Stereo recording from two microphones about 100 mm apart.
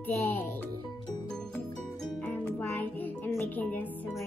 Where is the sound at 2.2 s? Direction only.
20° left (ahead or behind).